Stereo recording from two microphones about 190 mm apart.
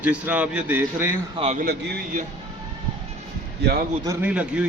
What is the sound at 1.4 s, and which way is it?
Speech, 35° right (ahead or behind).